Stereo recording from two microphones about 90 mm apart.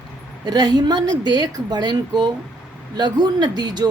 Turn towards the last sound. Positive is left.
turn(degrees=-50)  # may be behind; listen again after turning